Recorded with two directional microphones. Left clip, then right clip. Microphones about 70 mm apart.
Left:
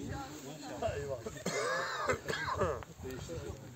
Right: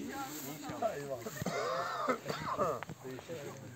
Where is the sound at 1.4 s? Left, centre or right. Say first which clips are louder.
Left 1 dB; left.